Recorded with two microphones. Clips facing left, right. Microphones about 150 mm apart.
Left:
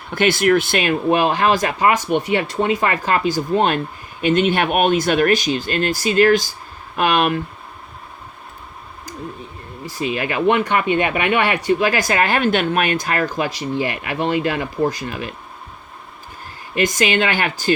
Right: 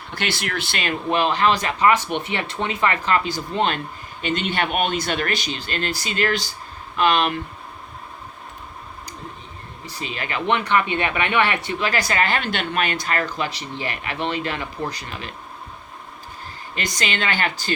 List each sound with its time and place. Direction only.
0.1 s speech: 50° left (ahead or behind)
9.8 s speech: 45° left (ahead or behind)
16.8 s speech: 45° left (ahead or behind)